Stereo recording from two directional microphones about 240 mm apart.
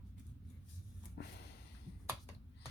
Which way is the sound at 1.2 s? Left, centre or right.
Left.